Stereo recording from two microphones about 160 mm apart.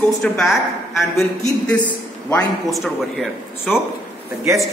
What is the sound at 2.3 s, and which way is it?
A man's voice, centre (ahead or behind).